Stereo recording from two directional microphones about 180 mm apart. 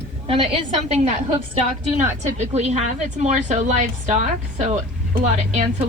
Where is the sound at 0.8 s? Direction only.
40° right (ahead or behind).